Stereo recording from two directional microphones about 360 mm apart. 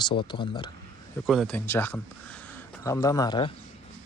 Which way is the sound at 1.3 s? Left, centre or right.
Centre.